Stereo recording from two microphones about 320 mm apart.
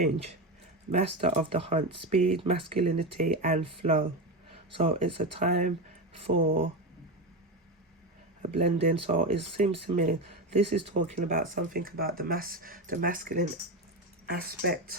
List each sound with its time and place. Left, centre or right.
0.9 s speech: centre
4.7 s speech: centre
8.4 s speech: right